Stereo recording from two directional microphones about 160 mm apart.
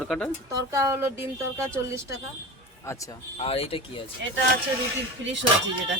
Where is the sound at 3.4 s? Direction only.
35° left (ahead or behind).